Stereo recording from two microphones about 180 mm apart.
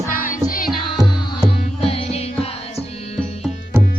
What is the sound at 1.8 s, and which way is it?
Music, 30° left (ahead or behind).